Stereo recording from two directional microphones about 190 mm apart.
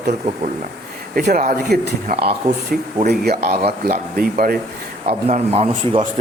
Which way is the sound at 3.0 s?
55° right (ahead or behind).